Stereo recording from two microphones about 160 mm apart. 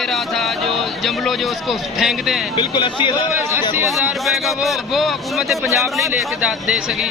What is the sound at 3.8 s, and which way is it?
Speech, centre (ahead or behind).